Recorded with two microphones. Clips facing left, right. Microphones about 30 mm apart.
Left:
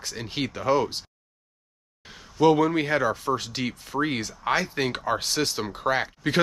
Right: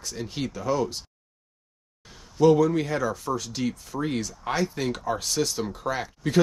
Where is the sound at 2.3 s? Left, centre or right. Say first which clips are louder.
Even; left.